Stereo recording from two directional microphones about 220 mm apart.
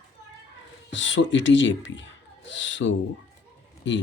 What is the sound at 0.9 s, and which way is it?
Speech, 55° left (ahead or behind).